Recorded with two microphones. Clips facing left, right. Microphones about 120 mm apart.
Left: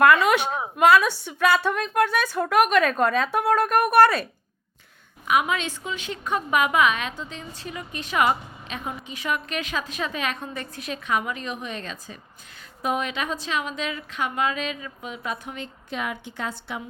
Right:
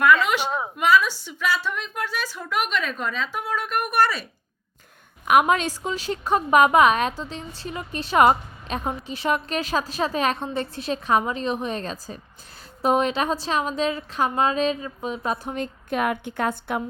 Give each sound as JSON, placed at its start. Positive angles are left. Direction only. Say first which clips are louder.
{"t": 0.9, "sound": "a woman's voice", "louder": "even", "side_deg": 55}
{"t": 5.2, "sound": "a woman's voice", "louder": "right 5 dB", "side_deg": -55}